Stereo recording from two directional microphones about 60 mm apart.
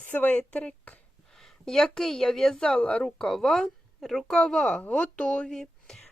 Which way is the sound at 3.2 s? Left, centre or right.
Centre.